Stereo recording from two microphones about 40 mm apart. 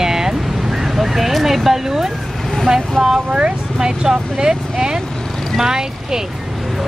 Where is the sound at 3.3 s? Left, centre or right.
Right.